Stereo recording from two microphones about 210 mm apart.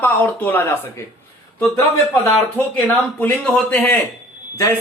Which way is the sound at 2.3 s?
10° left (ahead or behind).